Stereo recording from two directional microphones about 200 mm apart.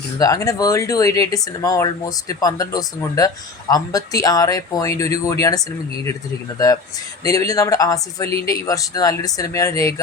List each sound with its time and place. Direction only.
0.2 s speech: 15° left (ahead or behind)
7.3 s speech: 15° left (ahead or behind)